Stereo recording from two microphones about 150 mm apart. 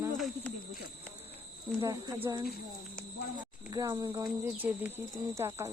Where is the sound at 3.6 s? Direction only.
25° right (ahead or behind).